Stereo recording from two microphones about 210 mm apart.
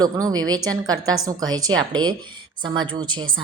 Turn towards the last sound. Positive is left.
turn(degrees=-20)  # may be behind; listen again after turning